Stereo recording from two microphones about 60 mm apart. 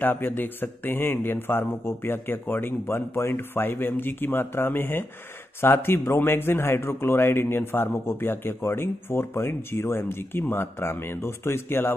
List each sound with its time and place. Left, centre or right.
0.0 s a man's voice: left